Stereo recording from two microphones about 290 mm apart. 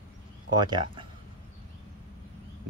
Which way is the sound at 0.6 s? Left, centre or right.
Centre.